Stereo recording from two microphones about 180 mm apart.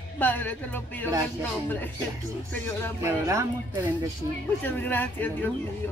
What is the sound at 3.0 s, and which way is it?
Speech, 15° right (ahead or behind).